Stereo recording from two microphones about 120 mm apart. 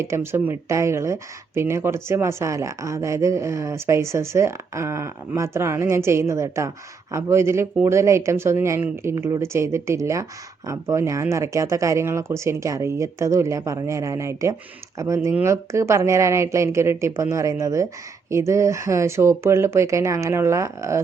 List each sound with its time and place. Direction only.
0.0 s speech: 20° right (ahead or behind)